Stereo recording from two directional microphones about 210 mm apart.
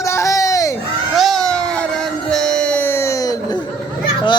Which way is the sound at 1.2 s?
Centre (ahead or behind).